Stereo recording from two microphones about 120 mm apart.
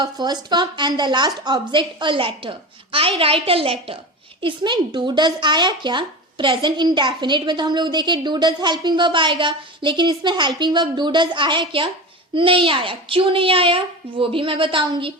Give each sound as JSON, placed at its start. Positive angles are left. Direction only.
{"t": 0.0, "sound": "a woman's voice", "side_deg": -35}